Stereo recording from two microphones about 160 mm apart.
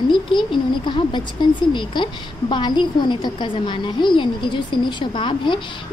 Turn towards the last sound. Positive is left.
turn(degrees=30)  # may be behind; listen again after turning